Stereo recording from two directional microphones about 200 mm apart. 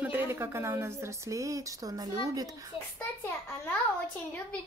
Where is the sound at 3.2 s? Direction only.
10° left (ahead or behind).